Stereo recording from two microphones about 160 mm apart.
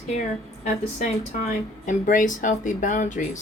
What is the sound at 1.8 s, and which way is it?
Speech, 55° left (ahead or behind).